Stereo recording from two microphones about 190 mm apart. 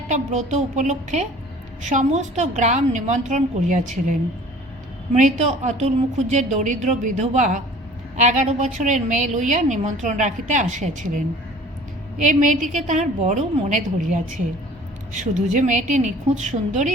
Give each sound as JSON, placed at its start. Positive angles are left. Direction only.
{"t": 0.1, "sound": "a woman's voice", "side_deg": -40}
{"t": 5.1, "sound": "a woman's voice", "side_deg": -40}
{"t": 12.3, "sound": "a woman's voice", "side_deg": -40}
{"t": 15.4, "sound": "a woman's voice", "side_deg": -40}